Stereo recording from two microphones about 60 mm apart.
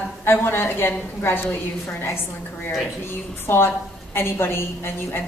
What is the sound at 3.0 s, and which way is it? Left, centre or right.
A woman's voice, left.